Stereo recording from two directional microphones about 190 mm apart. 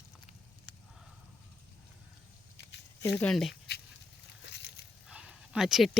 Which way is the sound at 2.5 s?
65° left (ahead or behind).